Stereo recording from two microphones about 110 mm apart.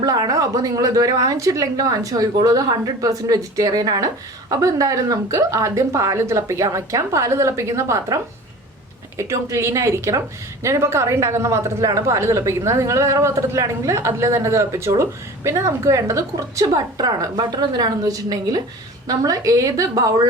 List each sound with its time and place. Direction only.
0.0 s a woman's voice: 35° right (ahead or behind)